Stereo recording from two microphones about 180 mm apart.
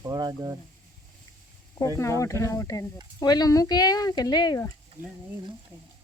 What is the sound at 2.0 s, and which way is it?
Speech, 15° left (ahead or behind).